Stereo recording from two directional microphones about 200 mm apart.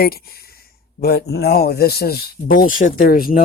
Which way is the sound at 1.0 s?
50° left (ahead or behind).